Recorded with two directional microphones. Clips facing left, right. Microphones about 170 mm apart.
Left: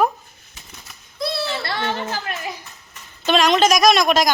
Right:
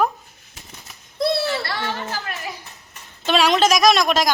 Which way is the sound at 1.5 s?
20° left (ahead or behind).